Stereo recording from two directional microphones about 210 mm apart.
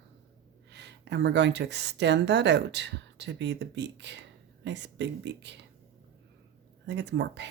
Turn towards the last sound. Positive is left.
turn(degrees=-55)  # may be behind; listen again after turning